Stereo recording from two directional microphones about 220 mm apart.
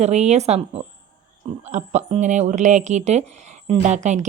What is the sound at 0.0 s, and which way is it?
A woman's voice, 30° right (ahead or behind).